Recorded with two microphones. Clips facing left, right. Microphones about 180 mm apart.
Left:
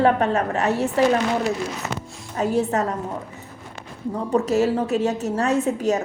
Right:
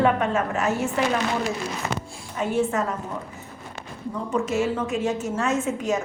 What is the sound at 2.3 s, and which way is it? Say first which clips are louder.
Speech: left 2 dB; 40° left (ahead or behind).